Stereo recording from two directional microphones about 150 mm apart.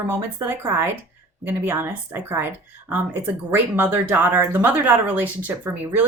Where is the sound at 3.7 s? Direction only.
15° right (ahead or behind).